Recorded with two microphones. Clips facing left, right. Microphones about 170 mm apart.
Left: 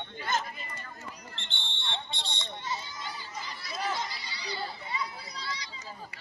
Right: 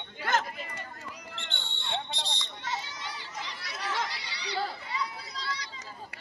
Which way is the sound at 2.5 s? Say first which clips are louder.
Even; 85° right.